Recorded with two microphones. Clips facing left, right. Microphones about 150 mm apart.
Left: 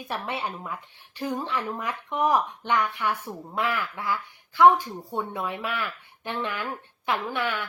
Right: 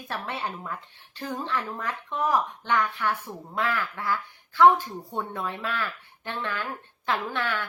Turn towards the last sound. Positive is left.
turn(degrees=15)  # may be behind; listen again after turning